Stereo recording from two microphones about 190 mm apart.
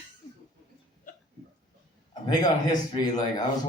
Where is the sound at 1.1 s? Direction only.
45° left (ahead or behind).